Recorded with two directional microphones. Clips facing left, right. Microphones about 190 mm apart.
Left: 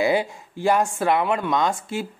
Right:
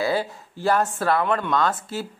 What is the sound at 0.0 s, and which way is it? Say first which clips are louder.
Speech: left 3 dB; 15° left (ahead or behind).